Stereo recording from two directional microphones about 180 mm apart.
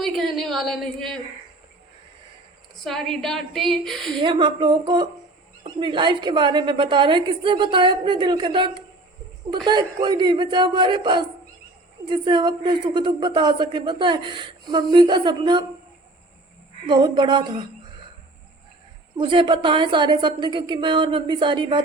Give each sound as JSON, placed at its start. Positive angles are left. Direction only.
{"t": 0.0, "sound": "a sound", "side_deg": 0}
{"t": 2.8, "sound": "a woman's voice", "side_deg": 0}
{"t": 4.2, "sound": "a woman's voice", "side_deg": -25}
{"t": 16.8, "sound": "a woman's voice", "side_deg": -25}
{"t": 19.1, "sound": "a woman's voice", "side_deg": -25}